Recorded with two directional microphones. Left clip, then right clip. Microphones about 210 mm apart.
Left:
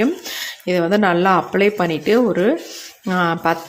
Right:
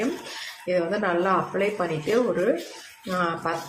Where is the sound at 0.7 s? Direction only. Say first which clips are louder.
Left 7 dB; 50° left (ahead or behind).